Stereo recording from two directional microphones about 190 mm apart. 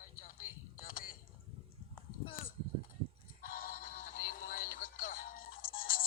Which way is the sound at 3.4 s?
50° left (ahead or behind).